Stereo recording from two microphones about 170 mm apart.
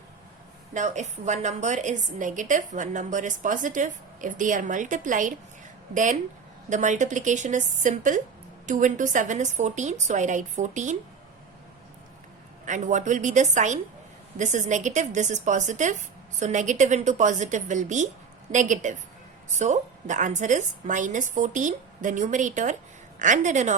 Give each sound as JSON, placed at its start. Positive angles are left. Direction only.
{"t": 0.7, "sound": "a woman's voice", "side_deg": -45}
{"t": 12.6, "sound": "a woman's voice", "side_deg": -45}